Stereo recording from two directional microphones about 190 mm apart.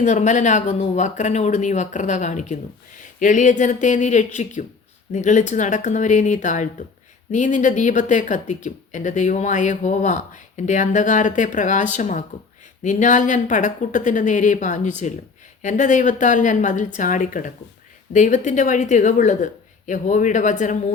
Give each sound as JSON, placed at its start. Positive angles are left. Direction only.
{"t": 0.0, "sound": "speech", "side_deg": 40}